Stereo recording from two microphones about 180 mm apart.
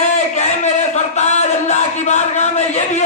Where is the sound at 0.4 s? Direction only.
40° left (ahead or behind).